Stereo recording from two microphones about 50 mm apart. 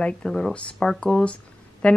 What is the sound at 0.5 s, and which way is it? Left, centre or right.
Speech, left.